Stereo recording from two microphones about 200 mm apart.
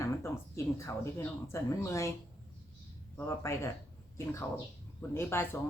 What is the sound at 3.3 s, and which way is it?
Speech, 15° left (ahead or behind).